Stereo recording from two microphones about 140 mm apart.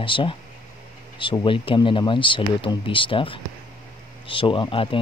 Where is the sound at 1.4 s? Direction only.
35° left (ahead or behind).